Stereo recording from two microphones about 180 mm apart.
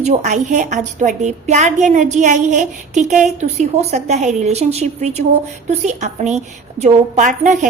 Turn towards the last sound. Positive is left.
turn(degrees=-40)  # may be behind; listen again after turning